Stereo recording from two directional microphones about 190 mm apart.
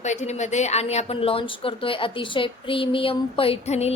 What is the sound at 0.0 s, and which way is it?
A woman's voice, 40° left (ahead or behind).